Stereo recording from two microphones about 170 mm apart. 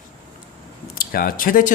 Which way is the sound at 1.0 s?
55° left (ahead or behind).